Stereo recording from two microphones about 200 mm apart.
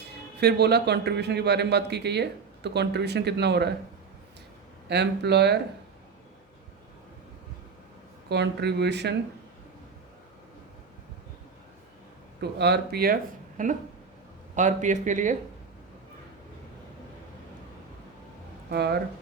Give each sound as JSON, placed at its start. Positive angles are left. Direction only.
{"t": 0.0, "sound": "a man's voice", "side_deg": -55}
{"t": 4.9, "sound": "a man's voice", "side_deg": -55}
{"t": 8.3, "sound": "a man's voice", "side_deg": -55}
{"t": 12.4, "sound": "a man's voice", "side_deg": -55}
{"t": 13.6, "sound": "speech", "side_deg": -40}
{"t": 18.7, "sound": "a man's voice", "side_deg": -55}